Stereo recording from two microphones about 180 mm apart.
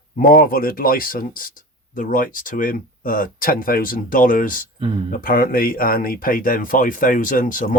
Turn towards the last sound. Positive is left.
turn(degrees=50)  # may be behind; listen again after turning